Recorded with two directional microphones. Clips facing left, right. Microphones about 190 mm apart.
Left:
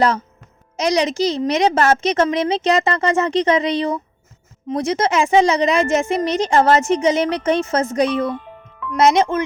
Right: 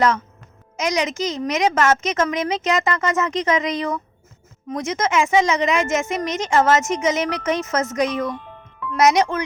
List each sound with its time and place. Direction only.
0.8 s a woman's voice: 35° left (ahead or behind)